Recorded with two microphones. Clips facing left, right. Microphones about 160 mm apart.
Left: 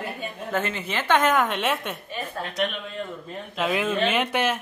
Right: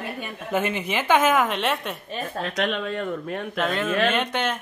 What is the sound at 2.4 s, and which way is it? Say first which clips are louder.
Speech: right 3 dB; 85° right.